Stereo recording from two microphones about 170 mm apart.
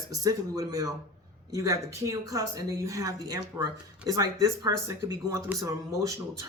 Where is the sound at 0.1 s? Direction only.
20° right (ahead or behind).